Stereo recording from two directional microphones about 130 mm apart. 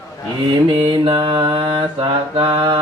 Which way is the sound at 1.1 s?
35° right (ahead or behind).